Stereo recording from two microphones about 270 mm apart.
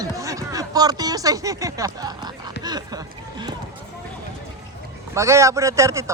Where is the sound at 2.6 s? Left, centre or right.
Centre.